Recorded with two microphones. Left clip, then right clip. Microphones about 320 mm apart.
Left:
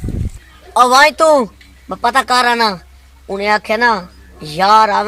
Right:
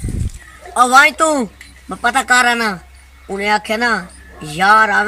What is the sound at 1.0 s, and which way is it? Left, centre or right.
Speech, centre.